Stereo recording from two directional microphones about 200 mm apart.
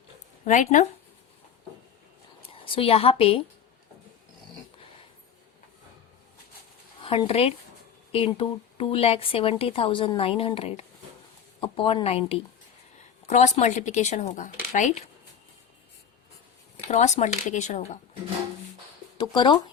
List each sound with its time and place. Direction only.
0.4 s speech: 40° left (ahead or behind)
2.5 s a woman's voice: 25° left (ahead or behind)
7.0 s speech: 30° left (ahead or behind)
16.9 s speech: 35° left (ahead or behind)
19.1 s speech: 25° left (ahead or behind)